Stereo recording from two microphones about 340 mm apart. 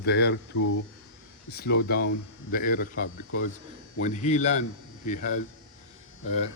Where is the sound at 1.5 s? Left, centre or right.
Left.